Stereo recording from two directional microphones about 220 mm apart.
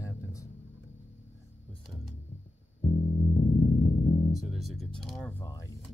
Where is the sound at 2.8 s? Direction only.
35° left (ahead or behind).